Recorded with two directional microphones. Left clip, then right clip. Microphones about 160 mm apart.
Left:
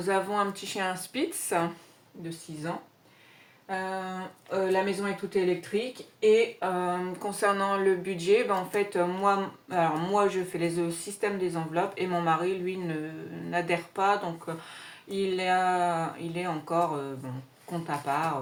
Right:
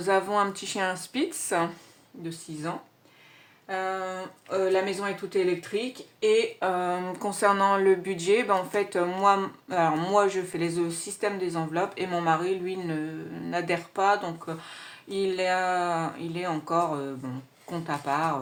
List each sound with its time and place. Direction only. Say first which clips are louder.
0.0 s speech: right 3 dB; 45° right (ahead or behind)
3.7 s speech: right 3 dB; 55° right (ahead or behind)